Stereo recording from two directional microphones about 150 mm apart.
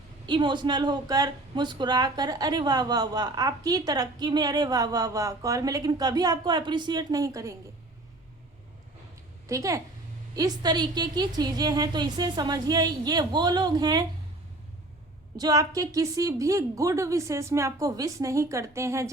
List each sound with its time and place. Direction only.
0.3 s a woman's voice: 30° right (ahead or behind)
9.5 s a woman's voice: 20° right (ahead or behind)
15.4 s a woman's voice: 25° right (ahead or behind)